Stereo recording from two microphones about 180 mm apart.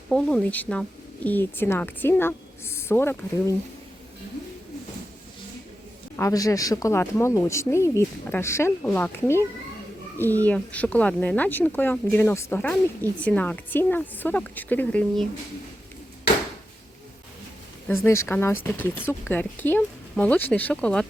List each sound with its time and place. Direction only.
0.1 s a woman's voice: 5° left (ahead or behind)
6.1 s a woman's voice: 15° left (ahead or behind)
17.8 s a woman's voice: 15° left (ahead or behind)